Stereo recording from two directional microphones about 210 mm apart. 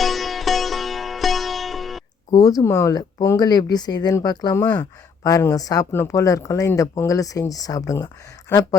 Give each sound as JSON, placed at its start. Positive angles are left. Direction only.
{"t": 0.0, "sound": "sitar", "side_deg": 0}
{"t": 2.3, "sound": "speech", "side_deg": 15}